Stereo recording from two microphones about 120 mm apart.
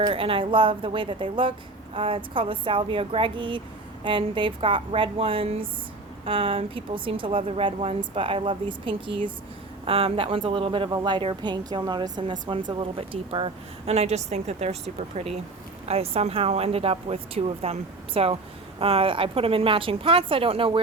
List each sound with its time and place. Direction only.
0.1 s a woman's voice: 50° right (ahead or behind)